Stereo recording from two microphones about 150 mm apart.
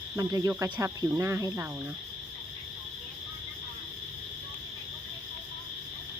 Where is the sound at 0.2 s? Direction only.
20° right (ahead or behind).